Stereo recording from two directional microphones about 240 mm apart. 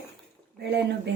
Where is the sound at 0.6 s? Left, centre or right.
Right.